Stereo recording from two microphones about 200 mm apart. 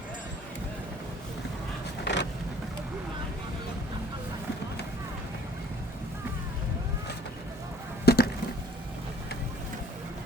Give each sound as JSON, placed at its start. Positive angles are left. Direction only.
{"t": 2.1, "sound": "vehicle", "side_deg": 60}
{"t": 8.0, "sound": "chop", "side_deg": 50}